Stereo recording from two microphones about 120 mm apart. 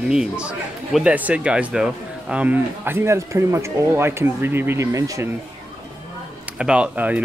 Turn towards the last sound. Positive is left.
turn(degrees=-10)  # may be behind; listen again after turning